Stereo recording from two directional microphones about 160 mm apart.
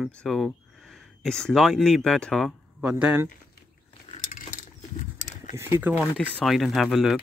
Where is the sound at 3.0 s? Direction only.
15° right (ahead or behind).